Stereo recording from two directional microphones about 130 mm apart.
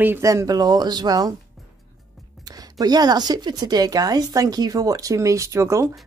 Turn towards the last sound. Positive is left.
turn(degrees=-25)  # may be behind; listen again after turning